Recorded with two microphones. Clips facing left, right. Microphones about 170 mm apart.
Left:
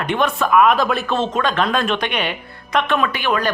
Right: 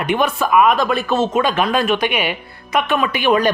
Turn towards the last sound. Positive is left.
turn(degrees=-15)  # may be behind; listen again after turning